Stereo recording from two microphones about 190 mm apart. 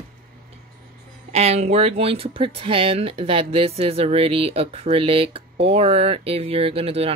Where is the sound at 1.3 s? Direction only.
35° right (ahead or behind).